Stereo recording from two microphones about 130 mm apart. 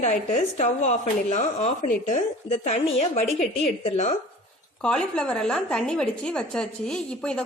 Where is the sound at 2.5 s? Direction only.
55° left (ahead or behind).